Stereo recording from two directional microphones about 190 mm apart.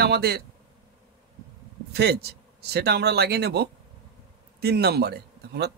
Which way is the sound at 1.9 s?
60° right (ahead or behind).